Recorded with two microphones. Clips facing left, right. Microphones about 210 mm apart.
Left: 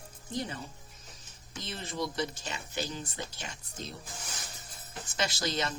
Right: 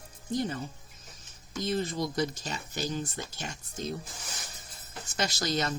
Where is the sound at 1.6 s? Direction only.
45° right (ahead or behind).